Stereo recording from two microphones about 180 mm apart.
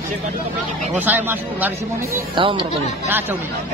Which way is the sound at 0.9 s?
10° right (ahead or behind).